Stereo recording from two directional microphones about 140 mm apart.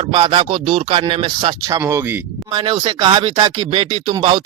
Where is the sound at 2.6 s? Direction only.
35° right (ahead or behind).